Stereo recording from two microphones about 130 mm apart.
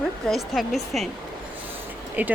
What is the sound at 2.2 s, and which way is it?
Speech, 10° right (ahead or behind).